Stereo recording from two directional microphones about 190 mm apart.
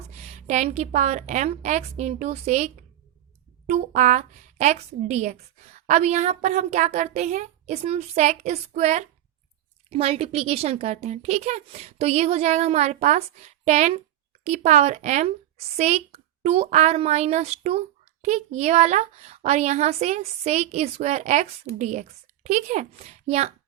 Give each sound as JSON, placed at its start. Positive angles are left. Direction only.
{"t": 0.1, "sound": "speech", "side_deg": -35}